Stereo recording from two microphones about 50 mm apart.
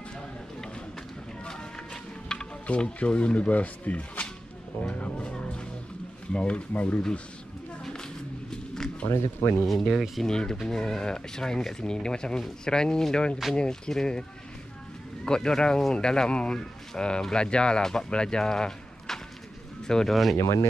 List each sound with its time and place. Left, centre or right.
0.7 s run: centre
2.6 s speech: left
7.8 s a sound: centre
9.1 s speech: left
9.7 s speech: centre
10.2 s speech: centre
15.2 s speech: centre
20.1 s speech: centre